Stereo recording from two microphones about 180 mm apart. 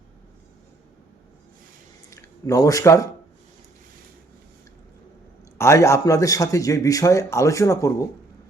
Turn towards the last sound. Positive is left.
turn(degrees=15)  # may be behind; listen again after turning